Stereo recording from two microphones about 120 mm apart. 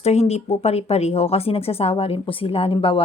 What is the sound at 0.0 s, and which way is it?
Speech, 65° left (ahead or behind).